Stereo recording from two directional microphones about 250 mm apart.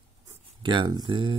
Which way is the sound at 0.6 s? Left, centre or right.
Centre.